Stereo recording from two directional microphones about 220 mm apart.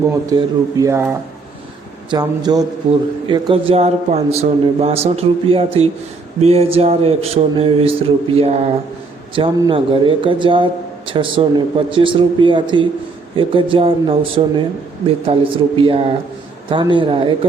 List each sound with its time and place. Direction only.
0.1 s a man's voice: 15° right (ahead or behind)